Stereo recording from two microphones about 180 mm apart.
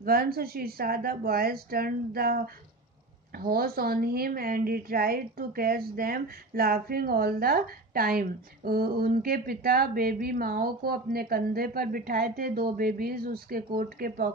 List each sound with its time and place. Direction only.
0.0 s a woman's voice: 55° right (ahead or behind)